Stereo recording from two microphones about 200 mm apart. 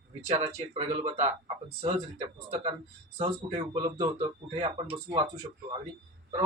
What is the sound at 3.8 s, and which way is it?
Speech, 30° right (ahead or behind).